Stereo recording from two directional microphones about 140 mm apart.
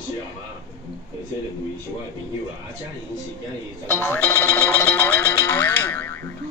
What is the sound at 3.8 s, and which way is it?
Music, 15° left (ahead or behind).